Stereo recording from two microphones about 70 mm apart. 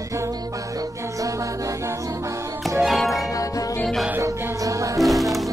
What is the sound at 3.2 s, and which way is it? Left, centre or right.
Music, left.